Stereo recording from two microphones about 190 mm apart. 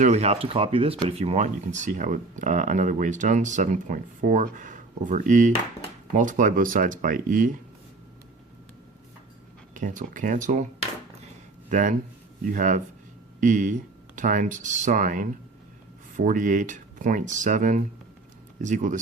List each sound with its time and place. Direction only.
0.0 s speech: 35° right (ahead or behind)
9.7 s speech: 40° right (ahead or behind)
11.7 s speech: 40° right (ahead or behind)